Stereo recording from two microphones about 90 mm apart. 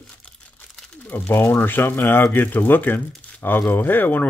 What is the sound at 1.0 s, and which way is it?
Speech, 20° left (ahead or behind).